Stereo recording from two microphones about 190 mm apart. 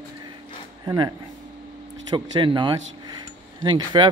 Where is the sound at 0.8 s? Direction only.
20° right (ahead or behind).